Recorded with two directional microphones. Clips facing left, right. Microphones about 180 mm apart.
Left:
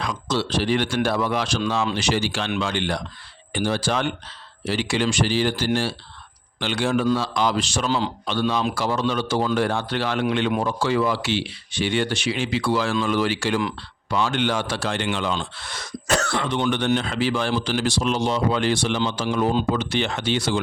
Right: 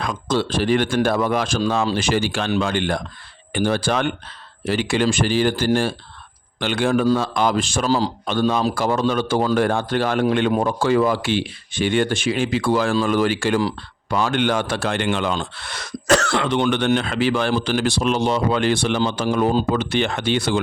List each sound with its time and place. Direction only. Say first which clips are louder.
0.0 s a man's voice: right 3 dB; 50° right (ahead or behind)
7.9 s speech: right 5 dB; 35° right (ahead or behind)
8.2 s a man's voice: right 3 dB; 50° right (ahead or behind)